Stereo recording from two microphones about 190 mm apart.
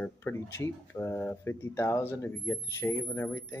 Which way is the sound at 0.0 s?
10° left (ahead or behind).